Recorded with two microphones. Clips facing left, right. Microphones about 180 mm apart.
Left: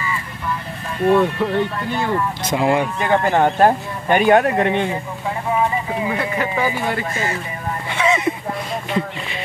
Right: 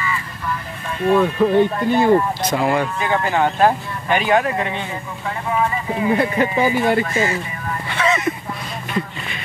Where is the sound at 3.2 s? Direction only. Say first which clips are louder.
Left 1 dB; 50° left (ahead or behind).